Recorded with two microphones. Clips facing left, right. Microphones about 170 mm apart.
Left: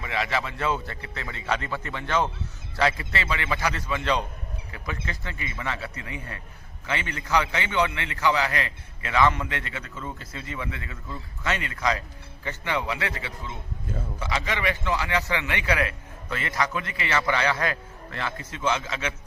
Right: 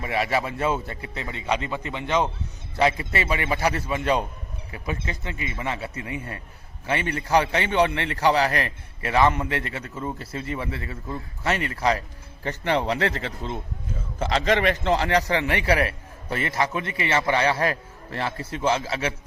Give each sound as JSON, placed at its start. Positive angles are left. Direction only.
{"t": 0.1, "sound": "a man's voice", "side_deg": -30}
{"t": 14.4, "sound": "a man's voice", "side_deg": -45}